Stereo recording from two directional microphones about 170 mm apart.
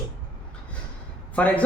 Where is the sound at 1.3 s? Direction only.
10° left (ahead or behind).